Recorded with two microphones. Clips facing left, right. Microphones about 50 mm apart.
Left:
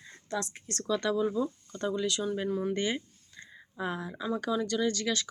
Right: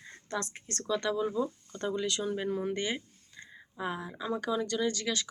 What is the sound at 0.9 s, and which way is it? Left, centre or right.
Speech, centre.